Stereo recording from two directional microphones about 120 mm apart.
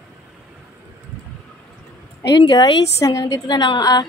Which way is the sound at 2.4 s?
35° left (ahead or behind).